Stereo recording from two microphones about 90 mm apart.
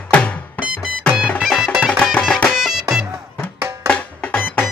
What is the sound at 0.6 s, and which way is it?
Music, 10° right (ahead or behind).